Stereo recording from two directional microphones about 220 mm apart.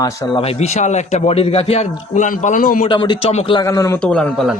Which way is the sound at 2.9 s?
20° left (ahead or behind).